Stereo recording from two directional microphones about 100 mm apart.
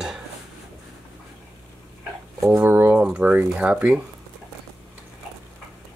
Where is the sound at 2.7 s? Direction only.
20° right (ahead or behind).